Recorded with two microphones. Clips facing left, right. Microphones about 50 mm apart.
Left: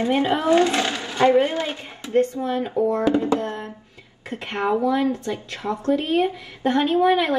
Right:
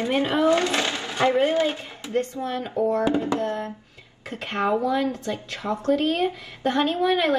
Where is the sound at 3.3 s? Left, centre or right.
Left.